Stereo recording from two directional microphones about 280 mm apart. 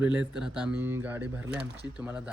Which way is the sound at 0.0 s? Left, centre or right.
Centre.